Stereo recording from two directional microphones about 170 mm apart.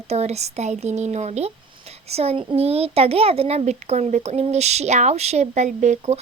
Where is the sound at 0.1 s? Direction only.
40° right (ahead or behind).